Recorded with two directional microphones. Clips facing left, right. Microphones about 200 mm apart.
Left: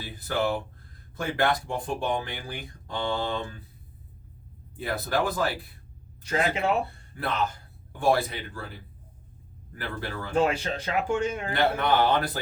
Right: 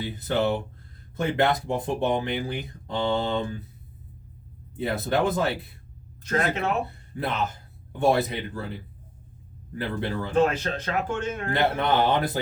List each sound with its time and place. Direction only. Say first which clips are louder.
0.0 s speech: right 3 dB; 20° right (ahead or behind)
4.8 s speech: right 3 dB; 25° right (ahead or behind)
7.2 s speech: right 1 dB; 20° right (ahead or behind)
9.7 s speech: right 6 dB; 20° right (ahead or behind)
10.4 s speech: right 2 dB; 10° left (ahead or behind)
11.5 s speech: right 1 dB; 20° right (ahead or behind)